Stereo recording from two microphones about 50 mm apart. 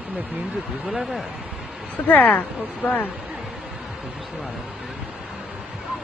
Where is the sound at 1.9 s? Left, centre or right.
Left.